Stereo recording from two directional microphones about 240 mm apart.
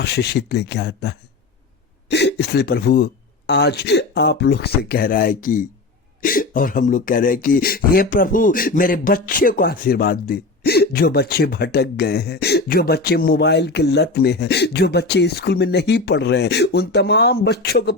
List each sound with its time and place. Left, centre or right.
0.0 s speech: left